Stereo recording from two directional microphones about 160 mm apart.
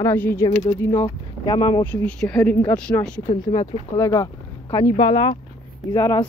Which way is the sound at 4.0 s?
20° left (ahead or behind).